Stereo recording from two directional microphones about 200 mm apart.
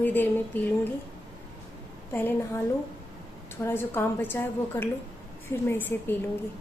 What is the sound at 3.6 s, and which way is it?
A woman's voice, 10° left (ahead or behind).